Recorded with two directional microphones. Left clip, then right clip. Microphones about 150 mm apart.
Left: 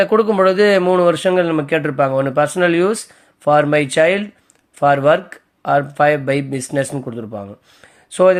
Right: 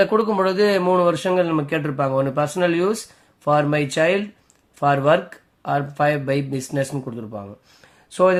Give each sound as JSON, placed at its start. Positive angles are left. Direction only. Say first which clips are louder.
{"t": 0.0, "sound": "speech", "louder": "left 5 dB", "side_deg": 35}